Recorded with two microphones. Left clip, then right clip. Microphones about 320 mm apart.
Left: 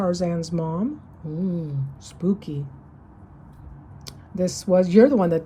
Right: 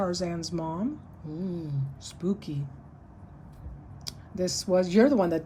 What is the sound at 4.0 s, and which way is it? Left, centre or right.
Speech, centre.